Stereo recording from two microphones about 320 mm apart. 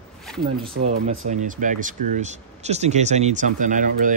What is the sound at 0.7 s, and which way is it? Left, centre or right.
Speech, right.